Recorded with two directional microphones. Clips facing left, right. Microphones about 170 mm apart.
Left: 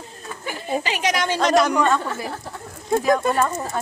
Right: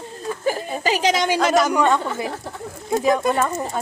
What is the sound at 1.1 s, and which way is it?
Speech, 20° right (ahead or behind).